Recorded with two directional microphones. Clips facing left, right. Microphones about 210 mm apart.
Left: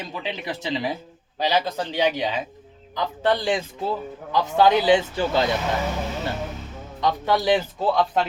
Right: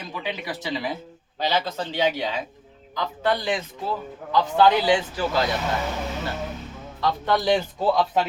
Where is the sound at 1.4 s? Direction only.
15° left (ahead or behind).